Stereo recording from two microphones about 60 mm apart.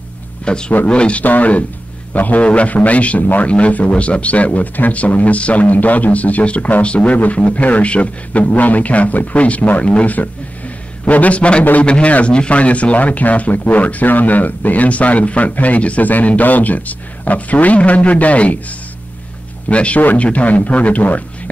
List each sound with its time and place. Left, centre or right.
0.5 s a man's voice: centre
19.7 s a man's voice: left